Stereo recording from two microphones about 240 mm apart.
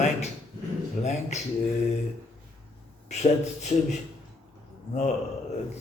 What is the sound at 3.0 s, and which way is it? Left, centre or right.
Speech, left.